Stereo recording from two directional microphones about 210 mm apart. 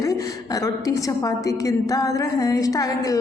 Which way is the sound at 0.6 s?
15° left (ahead or behind).